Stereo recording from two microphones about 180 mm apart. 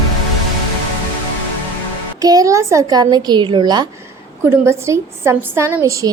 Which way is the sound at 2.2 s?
20° right (ahead or behind).